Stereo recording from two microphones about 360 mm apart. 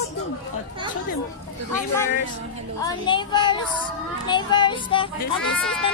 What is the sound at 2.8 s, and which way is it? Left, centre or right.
Speech, centre.